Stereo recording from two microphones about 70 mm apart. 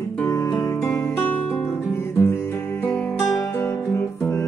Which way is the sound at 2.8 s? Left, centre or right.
Left.